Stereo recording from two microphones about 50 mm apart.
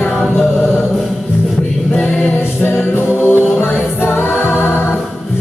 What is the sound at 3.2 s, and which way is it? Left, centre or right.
Music, left.